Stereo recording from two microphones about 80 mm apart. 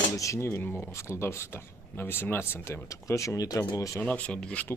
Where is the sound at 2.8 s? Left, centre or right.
Left.